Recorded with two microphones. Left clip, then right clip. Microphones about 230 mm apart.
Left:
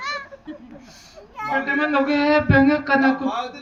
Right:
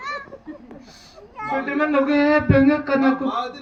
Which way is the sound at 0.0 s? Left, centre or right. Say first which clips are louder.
Left 2 dB; left.